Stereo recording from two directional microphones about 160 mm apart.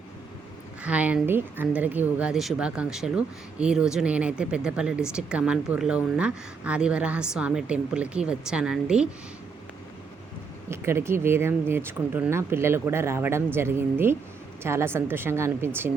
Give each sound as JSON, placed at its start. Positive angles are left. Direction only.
{"t": 0.8, "sound": "speech", "side_deg": -10}
{"t": 10.7, "sound": "speech", "side_deg": -15}